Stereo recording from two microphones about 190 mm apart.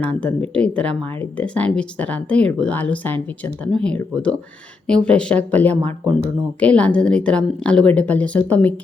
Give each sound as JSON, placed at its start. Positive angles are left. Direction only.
{"t": 0.0, "sound": "speech", "side_deg": 5}